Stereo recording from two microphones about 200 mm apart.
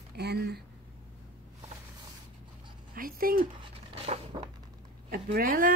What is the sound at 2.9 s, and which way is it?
Speech, 45° right (ahead or behind).